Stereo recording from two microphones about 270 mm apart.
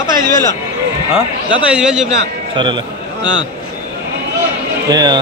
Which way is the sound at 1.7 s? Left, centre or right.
Centre.